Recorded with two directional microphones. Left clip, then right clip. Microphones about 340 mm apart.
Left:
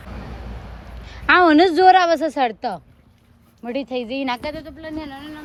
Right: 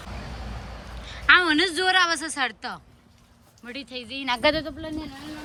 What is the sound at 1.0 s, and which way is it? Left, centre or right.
A woman's voice, centre.